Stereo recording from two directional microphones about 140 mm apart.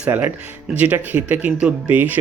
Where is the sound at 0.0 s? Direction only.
15° right (ahead or behind).